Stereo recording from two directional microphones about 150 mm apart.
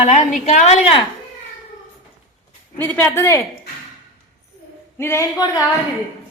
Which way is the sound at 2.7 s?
15° left (ahead or behind).